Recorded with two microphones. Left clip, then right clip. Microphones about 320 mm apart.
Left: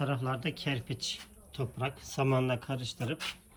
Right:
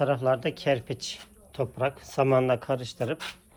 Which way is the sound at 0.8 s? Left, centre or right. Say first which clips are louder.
Right 3 dB; centre.